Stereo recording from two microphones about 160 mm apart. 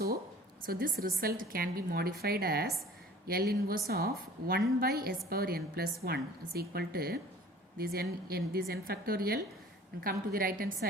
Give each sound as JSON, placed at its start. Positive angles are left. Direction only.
{"t": 0.6, "sound": "a woman's voice", "side_deg": -70}